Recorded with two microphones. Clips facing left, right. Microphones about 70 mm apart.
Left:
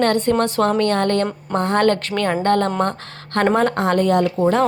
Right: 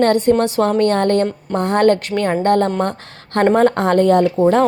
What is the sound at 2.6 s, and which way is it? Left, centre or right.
Speech, left.